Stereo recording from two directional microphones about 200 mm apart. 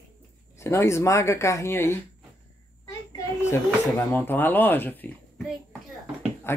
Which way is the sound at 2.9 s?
15° left (ahead or behind).